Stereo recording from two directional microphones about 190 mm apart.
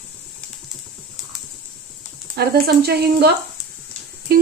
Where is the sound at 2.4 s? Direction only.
55° right (ahead or behind).